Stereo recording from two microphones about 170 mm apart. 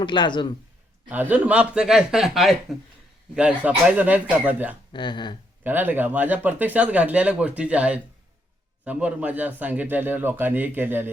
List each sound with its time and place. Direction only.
0.0 s a man's voice: 25° left (ahead or behind)
1.0 s speech: 10° right (ahead or behind)
4.9 s a man's voice: 25° left (ahead or behind)
5.6 s speech: 10° right (ahead or behind)